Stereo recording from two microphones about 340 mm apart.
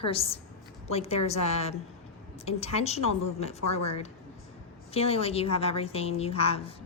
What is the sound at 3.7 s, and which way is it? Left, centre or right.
Speech, left.